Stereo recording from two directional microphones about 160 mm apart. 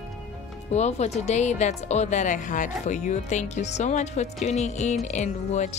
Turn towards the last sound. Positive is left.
turn(degrees=45)  # may be behind; listen again after turning